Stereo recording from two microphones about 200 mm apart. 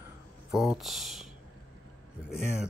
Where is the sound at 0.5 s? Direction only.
Centre (ahead or behind).